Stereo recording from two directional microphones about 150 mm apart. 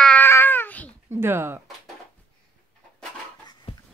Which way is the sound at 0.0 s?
10° left (ahead or behind).